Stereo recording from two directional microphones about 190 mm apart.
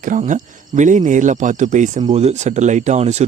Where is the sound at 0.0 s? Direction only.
40° right (ahead or behind).